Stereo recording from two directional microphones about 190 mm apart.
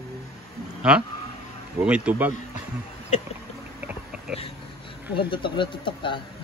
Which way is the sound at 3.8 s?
5° right (ahead or behind).